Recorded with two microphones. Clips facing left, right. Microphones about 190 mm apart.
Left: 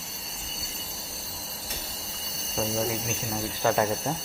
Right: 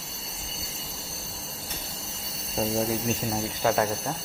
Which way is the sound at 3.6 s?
10° right (ahead or behind).